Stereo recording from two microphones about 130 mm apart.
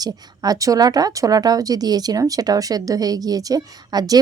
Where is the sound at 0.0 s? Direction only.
30° right (ahead or behind).